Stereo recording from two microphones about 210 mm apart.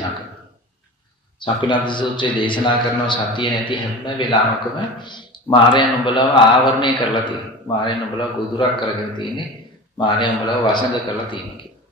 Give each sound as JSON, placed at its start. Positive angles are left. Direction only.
{"t": 1.4, "sound": "a man's voice", "side_deg": 20}